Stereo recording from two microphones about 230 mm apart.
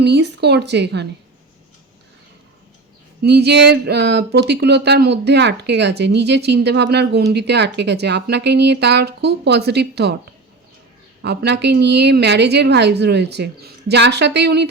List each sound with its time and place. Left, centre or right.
0.0 s speech: right
3.2 s speech: right
11.2 s speech: right